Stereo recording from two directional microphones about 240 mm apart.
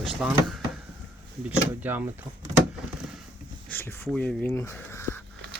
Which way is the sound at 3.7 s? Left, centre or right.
Centre.